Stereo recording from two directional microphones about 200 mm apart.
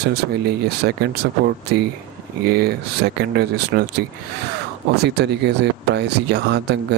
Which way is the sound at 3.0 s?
70° right (ahead or behind).